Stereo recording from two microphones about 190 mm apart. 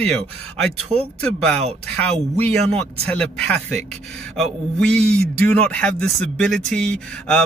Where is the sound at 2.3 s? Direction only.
35° right (ahead or behind).